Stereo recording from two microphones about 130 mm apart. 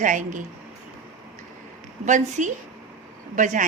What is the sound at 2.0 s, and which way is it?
Speech, 70° right (ahead or behind).